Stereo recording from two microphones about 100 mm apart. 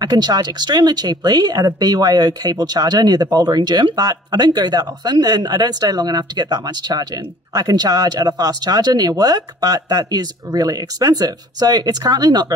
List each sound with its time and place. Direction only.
0.0 s speech: 40° right (ahead or behind)